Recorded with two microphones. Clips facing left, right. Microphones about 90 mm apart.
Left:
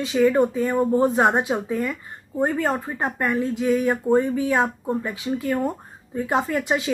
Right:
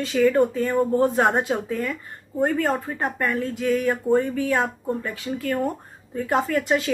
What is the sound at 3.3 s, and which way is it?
A woman's voice, 15° left (ahead or behind).